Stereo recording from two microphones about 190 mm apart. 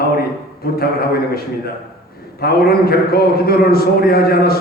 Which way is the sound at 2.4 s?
55° left (ahead or behind).